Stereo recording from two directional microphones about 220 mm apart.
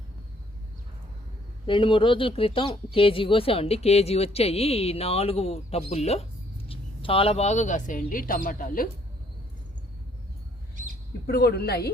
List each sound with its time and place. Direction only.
1.6 s speech: 20° left (ahead or behind); by 8.9 s 40° left (ahead or behind)
11.3 s a woman's voice: 45° left (ahead or behind)